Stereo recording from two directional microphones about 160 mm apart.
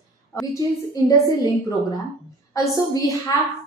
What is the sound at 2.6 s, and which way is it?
Speech, 20° left (ahead or behind).